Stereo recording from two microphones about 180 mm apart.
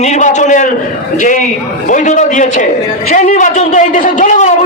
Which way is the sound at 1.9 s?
45° left (ahead or behind).